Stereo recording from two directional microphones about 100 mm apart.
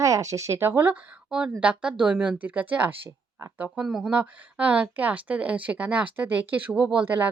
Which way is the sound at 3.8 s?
5° right (ahead or behind).